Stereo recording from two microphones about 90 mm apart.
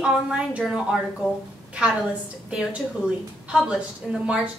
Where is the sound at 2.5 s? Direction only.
10° right (ahead or behind).